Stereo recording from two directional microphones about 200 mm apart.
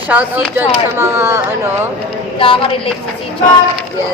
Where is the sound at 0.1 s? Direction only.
5° right (ahead or behind).